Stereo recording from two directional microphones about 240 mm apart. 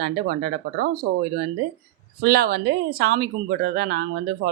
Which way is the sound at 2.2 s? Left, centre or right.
Right.